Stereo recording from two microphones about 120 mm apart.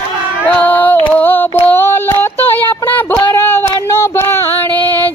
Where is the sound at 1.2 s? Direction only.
15° left (ahead or behind).